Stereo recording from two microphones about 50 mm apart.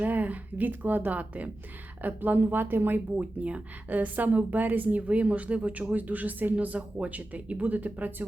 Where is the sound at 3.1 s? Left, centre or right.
Right.